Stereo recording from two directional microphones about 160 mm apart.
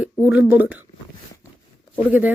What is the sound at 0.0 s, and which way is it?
Speech, 10° right (ahead or behind).